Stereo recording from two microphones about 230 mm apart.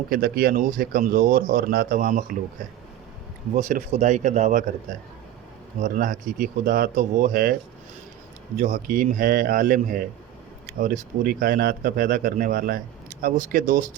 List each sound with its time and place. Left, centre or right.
0.1 s a man's voice: right
3.5 s a man's voice: right
8.5 s a man's voice: right